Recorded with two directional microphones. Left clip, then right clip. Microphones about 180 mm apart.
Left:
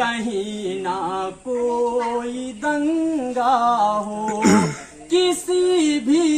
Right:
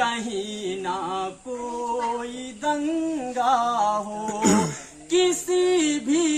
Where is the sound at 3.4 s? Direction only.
5° right (ahead or behind).